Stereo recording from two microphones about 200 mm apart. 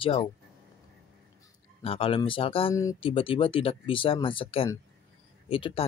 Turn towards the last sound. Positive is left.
turn(degrees=25)  # may be behind; listen again after turning